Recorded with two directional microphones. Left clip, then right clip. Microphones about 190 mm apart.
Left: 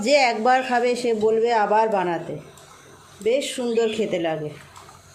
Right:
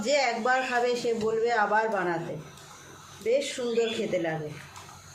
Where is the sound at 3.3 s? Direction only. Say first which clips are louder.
Left 5 dB; 35° left (ahead or behind).